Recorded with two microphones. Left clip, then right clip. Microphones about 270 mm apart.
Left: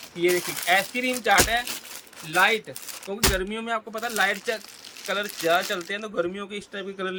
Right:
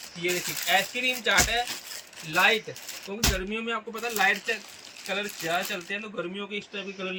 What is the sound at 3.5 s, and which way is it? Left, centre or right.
Speech, centre.